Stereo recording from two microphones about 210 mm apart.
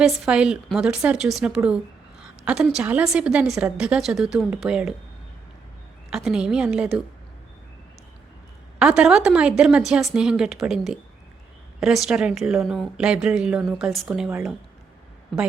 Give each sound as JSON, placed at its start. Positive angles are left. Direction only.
{"t": 0.0, "sound": "speech", "side_deg": -5}
{"t": 6.1, "sound": "speech", "side_deg": 0}
{"t": 8.8, "sound": "speech", "side_deg": -5}